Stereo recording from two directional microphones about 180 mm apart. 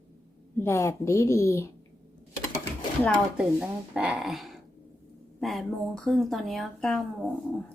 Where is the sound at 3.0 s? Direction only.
5° left (ahead or behind).